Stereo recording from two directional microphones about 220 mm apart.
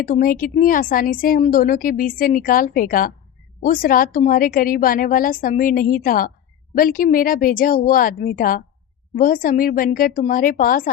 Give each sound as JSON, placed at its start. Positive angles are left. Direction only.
{"t": 0.0, "sound": "a woman's voice", "side_deg": 40}